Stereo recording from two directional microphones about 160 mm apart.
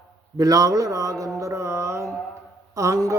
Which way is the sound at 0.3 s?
25° right (ahead or behind).